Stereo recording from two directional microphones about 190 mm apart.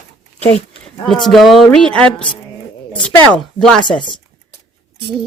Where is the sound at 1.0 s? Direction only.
Centre (ahead or behind).